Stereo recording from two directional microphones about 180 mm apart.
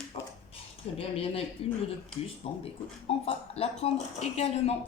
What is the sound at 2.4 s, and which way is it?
Speech, 30° left (ahead or behind).